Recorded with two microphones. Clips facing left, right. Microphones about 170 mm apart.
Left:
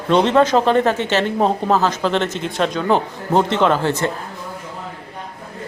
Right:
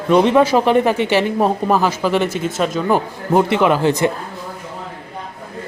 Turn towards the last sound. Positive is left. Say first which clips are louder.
# right 2 dB
turn(degrees=-15)  # may be behind; listen again after turning